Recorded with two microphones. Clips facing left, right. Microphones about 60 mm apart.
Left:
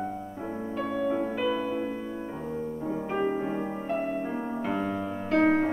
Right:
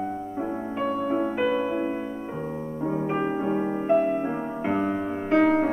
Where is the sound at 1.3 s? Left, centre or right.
Right.